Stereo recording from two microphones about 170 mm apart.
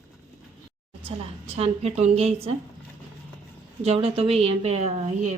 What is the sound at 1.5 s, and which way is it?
Speech, 40° right (ahead or behind).